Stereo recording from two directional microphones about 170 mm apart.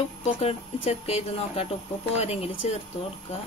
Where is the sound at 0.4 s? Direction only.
35° left (ahead or behind).